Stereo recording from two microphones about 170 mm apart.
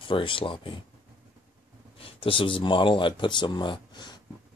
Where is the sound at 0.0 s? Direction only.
30° left (ahead or behind).